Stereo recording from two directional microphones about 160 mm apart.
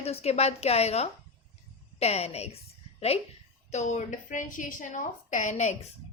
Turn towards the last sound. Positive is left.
turn(degrees=45)  # may be behind; listen again after turning